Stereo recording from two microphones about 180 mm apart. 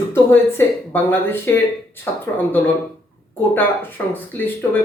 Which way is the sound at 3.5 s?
10° left (ahead or behind).